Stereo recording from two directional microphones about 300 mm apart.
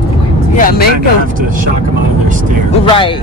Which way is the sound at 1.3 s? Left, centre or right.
Right.